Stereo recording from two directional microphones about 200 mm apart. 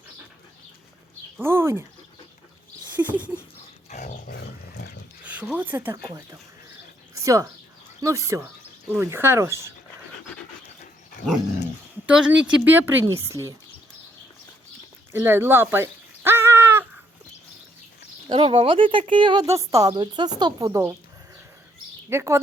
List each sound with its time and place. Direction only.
1.4 s a woman's voice: 10° right (ahead or behind)
2.9 s a sound: 10° right (ahead or behind)
3.8 s dog: 35° left (ahead or behind)
4.3 s dog: 55° left (ahead or behind)
5.2 s speech: 5° right (ahead or behind)
7.2 s a woman's voice: 15° right (ahead or behind)
12.0 s a woman's voice: 5° right (ahead or behind)
15.1 s a sound: 10° right (ahead or behind)
18.3 s a woman's voice: 25° right (ahead or behind)
22.1 s a woman's voice: 15° right (ahead or behind)